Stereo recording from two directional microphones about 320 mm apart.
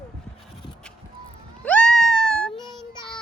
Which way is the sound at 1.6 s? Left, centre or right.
Centre.